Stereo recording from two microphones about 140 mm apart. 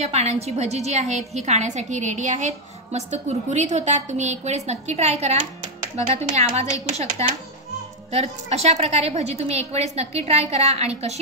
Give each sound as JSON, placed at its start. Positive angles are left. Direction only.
{"t": 0.0, "sound": "a woman's voice", "side_deg": -50}